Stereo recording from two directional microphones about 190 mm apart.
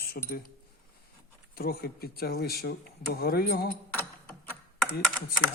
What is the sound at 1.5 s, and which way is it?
Speech, 50° left (ahead or behind).